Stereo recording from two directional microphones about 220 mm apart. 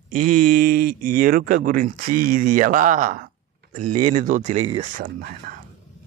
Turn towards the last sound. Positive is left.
turn(degrees=-45)  # may be behind; listen again after turning